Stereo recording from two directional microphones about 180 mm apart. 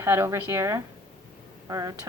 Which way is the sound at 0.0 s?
15° right (ahead or behind).